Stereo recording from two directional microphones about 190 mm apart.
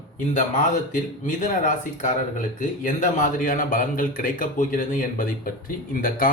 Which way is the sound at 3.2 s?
45° left (ahead or behind).